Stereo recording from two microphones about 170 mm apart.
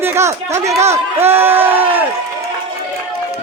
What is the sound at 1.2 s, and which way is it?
Speech, 15° right (ahead or behind).